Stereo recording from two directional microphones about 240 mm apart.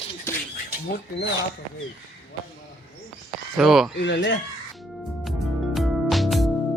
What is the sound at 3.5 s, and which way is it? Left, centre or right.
Speech, centre.